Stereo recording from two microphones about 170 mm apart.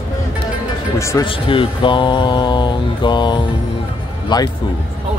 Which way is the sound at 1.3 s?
30° left (ahead or behind).